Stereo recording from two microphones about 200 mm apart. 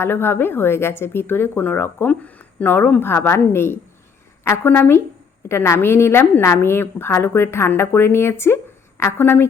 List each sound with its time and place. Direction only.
0.0 s speech: 10° left (ahead or behind)